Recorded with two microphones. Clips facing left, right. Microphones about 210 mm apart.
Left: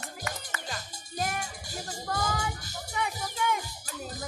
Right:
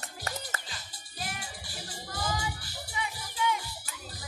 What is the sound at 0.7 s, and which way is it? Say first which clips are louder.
Music: left 9 dB; 45° left (ahead or behind).